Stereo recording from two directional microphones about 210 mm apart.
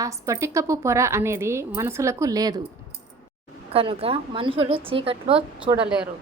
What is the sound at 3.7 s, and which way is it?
A woman's voice, 25° right (ahead or behind).